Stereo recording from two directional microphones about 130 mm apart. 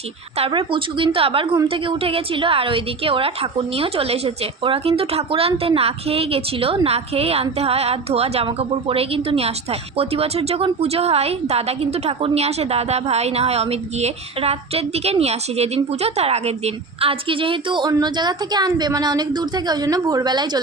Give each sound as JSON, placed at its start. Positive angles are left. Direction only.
{"t": 0.3, "sound": "a woman's voice", "side_deg": -45}